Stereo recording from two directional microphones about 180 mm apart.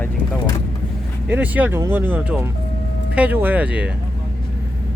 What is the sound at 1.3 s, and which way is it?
Speech, 10° right (ahead or behind).